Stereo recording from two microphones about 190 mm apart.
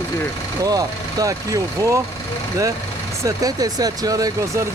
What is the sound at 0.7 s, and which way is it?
Speech, 20° right (ahead or behind).